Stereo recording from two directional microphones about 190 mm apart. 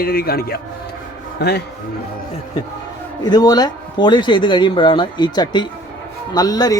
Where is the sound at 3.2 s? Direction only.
20° left (ahead or behind).